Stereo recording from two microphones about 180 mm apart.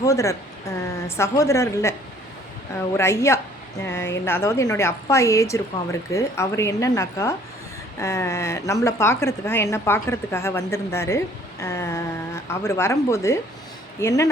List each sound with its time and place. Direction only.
0.0 s a woman's voice: 15° left (ahead or behind)
3.0 s a woman's voice: 15° left (ahead or behind)